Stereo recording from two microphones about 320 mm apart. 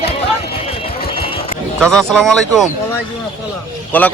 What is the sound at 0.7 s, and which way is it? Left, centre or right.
Vehicle, centre.